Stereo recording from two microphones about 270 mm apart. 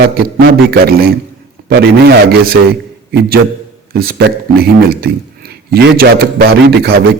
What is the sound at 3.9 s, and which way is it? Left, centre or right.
A man's voice, right.